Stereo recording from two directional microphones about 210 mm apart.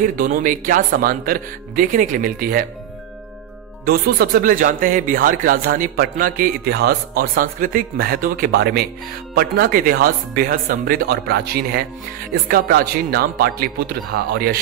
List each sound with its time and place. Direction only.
0.0 s speech: 40° right (ahead or behind)
3.8 s speech: 45° right (ahead or behind)